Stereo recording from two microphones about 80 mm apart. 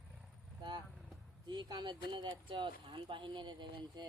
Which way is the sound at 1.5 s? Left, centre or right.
Right.